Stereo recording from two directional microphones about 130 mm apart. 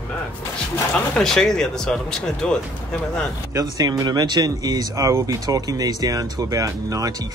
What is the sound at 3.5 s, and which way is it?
Speech, 30° right (ahead or behind).